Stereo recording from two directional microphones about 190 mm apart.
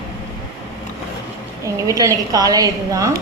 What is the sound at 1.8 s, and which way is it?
A woman's voice, 15° right (ahead or behind).